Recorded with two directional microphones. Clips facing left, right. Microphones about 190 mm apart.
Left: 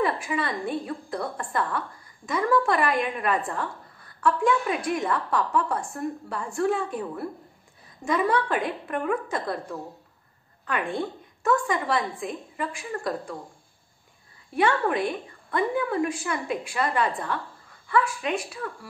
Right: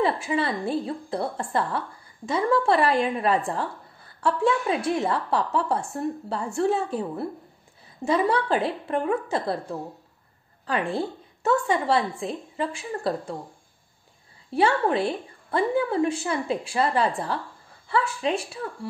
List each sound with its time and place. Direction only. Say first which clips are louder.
0.0 s a woman's voice: right 2 dB; 30° right (ahead or behind)
14.5 s a woman's voice: right 2 dB; 30° right (ahead or behind)